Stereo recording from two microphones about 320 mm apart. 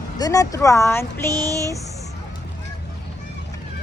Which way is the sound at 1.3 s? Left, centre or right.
Centre.